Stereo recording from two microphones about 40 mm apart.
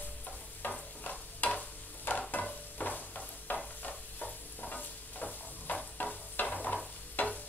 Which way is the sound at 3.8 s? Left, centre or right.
Left.